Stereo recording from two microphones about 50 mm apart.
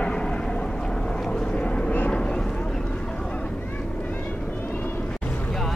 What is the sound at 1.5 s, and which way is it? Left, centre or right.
Vehicle, left.